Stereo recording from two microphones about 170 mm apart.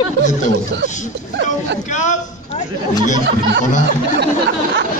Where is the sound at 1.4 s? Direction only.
45° left (ahead or behind).